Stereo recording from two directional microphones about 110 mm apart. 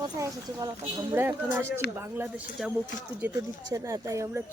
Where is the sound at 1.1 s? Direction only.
20° right (ahead or behind).